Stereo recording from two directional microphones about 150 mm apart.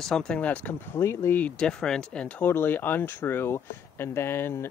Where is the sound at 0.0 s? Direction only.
5° left (ahead or behind).